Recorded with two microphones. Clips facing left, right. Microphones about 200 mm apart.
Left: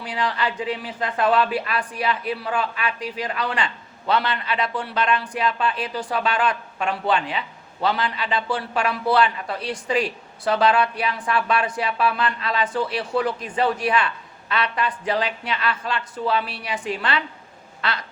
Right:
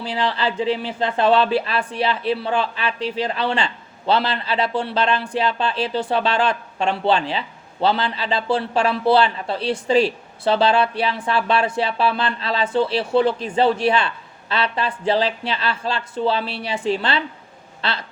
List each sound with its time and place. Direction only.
0.0 s speech: 30° right (ahead or behind)